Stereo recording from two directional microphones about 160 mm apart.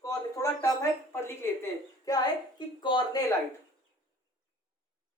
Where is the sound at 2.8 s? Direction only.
30° left (ahead or behind).